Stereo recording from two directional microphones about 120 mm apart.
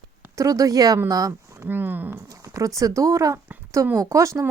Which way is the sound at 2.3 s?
25° right (ahead or behind).